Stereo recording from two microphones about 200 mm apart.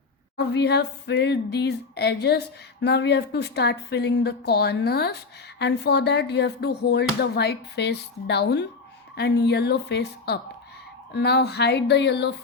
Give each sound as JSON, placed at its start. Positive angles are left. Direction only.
{"t": 0.3, "sound": "a woman's voice", "side_deg": 55}